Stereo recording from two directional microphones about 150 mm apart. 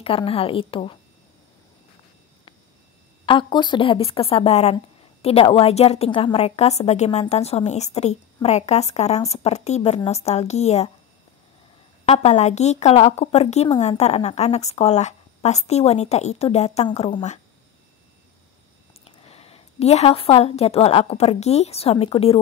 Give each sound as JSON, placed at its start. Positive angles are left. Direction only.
{"t": 0.0, "sound": "a woman's voice", "side_deg": 40}
{"t": 3.3, "sound": "a woman's voice", "side_deg": 30}
{"t": 12.1, "sound": "a woman's voice", "side_deg": 50}
{"t": 19.0, "sound": "a woman's voice", "side_deg": 40}